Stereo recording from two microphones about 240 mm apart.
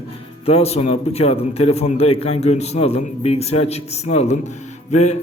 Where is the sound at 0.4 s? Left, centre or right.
Left.